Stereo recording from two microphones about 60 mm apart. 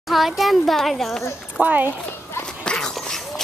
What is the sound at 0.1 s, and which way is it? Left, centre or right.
A child's voice, centre.